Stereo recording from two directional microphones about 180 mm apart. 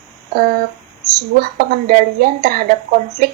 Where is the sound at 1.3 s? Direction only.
60° right (ahead or behind).